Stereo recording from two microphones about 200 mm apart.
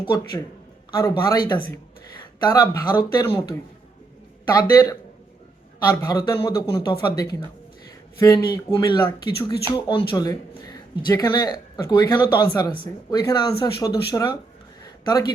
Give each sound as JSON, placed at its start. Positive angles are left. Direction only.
{"t": 0.0, "sound": "speech", "side_deg": 25}
{"t": 4.7, "sound": "speech", "side_deg": 20}